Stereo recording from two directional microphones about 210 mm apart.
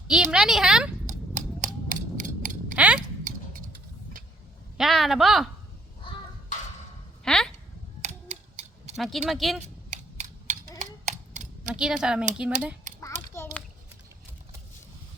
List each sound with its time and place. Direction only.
0.1 s a woman's voice: 5° right (ahead or behind)
1.0 s a sound: 35° right (ahead or behind)
2.7 s a sound: 5° right (ahead or behind)
4.8 s a woman's voice: centre (ahead or behind)
7.3 s speech: 5° left (ahead or behind)
9.0 s a woman's voice: centre (ahead or behind)
9.9 s scissors: 35° right (ahead or behind)
11.6 s a woman's voice: 5° right (ahead or behind)
13.3 s a sound: 10° left (ahead or behind)